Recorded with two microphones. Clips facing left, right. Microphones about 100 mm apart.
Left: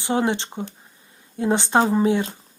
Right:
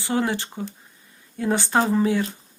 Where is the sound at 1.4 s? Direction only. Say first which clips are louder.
Left 2 dB; 20° left (ahead or behind).